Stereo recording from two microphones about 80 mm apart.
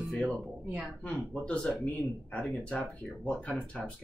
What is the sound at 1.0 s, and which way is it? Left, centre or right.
Speech, centre.